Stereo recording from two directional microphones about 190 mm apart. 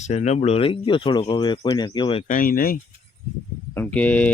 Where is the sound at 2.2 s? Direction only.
45° left (ahead or behind).